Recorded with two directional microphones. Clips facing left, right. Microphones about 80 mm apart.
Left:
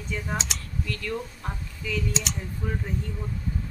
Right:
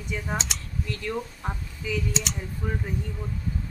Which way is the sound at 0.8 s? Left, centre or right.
Right.